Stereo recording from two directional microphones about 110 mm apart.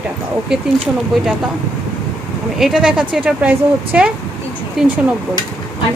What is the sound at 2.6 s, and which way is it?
A woman's voice, 5° right (ahead or behind).